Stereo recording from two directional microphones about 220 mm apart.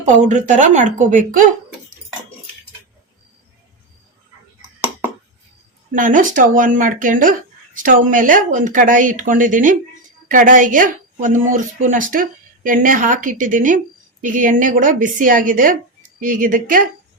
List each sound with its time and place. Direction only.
0.0 s a woman's voice: 35° right (ahead or behind)
5.9 s a woman's voice: 35° right (ahead or behind)